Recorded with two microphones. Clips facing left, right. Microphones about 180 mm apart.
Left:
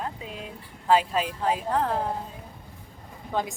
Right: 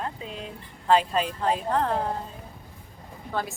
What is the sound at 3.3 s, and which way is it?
Speech, 15° left (ahead or behind).